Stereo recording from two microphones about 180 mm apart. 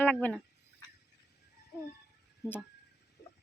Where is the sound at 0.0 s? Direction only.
5° left (ahead or behind).